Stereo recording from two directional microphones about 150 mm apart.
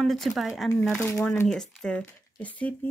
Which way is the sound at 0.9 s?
15° left (ahead or behind).